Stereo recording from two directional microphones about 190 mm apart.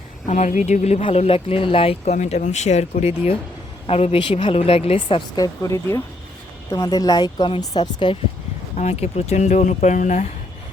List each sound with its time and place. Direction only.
0.3 s speech: 35° left (ahead or behind)
5.6 s speech: 15° left (ahead or behind)
8.7 s speech: 35° left (ahead or behind)